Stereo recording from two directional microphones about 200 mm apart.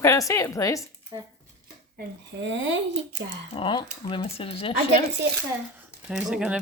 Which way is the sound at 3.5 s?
25° left (ahead or behind).